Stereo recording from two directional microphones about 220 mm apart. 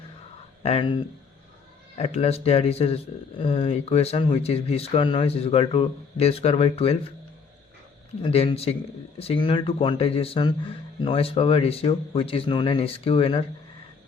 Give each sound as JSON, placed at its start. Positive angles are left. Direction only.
{"t": 0.6, "sound": "speech", "side_deg": 25}
{"t": 8.2, "sound": "speech", "side_deg": 25}